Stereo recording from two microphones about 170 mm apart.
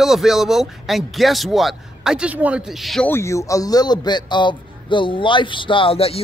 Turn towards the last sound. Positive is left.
turn(degrees=35)  # may be behind; listen again after turning